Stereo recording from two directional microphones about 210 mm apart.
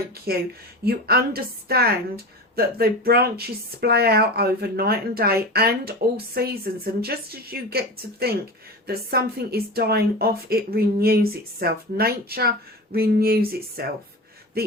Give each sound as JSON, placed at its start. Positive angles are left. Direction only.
{"t": 0.3, "sound": "a woman's voice", "side_deg": -45}